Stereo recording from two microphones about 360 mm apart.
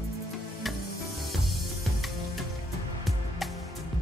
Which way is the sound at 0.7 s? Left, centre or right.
Centre.